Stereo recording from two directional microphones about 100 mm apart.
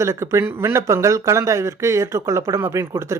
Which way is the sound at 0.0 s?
30° right (ahead or behind).